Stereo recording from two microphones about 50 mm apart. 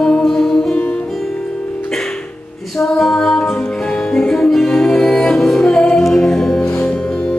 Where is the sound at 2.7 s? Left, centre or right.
Centre.